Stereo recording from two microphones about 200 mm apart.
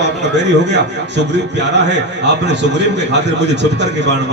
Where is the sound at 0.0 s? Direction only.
60° right (ahead or behind).